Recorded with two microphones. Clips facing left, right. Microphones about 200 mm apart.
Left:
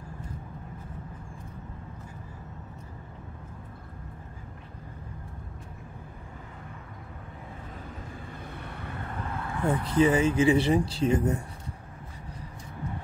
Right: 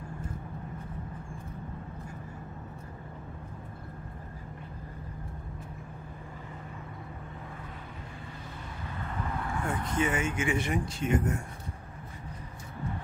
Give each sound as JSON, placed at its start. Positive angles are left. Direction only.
{"t": 9.7, "sound": "speech", "side_deg": 35}